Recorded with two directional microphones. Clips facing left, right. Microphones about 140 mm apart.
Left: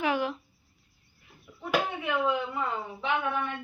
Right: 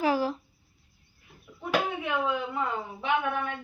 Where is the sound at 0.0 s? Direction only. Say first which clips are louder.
Right 2 dB; 35° right (ahead or behind).